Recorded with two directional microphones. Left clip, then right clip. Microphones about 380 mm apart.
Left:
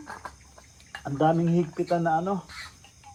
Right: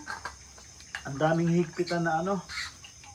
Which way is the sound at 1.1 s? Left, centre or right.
Centre.